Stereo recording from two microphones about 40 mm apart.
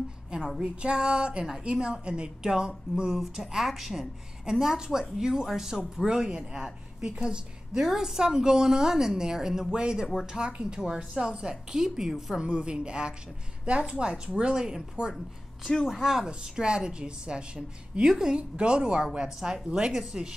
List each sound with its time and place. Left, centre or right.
0.3 s a woman's voice: right
3.3 s a woman's voice: centre
12.4 s a woman's voice: right